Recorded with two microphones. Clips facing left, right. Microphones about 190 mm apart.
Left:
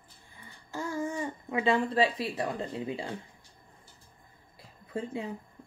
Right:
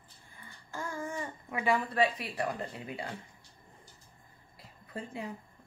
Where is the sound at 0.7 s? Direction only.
20° left (ahead or behind).